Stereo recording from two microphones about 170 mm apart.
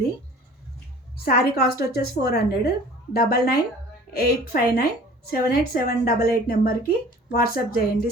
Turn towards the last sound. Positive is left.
turn(degrees=60)  # may be behind; listen again after turning